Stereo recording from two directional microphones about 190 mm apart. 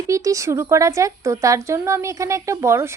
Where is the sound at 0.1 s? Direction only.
15° right (ahead or behind).